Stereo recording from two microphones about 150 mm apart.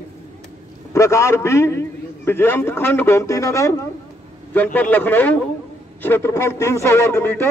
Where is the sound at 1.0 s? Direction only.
20° left (ahead or behind).